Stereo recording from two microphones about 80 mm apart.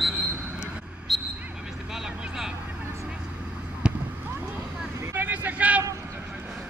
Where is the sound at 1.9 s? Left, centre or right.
Centre.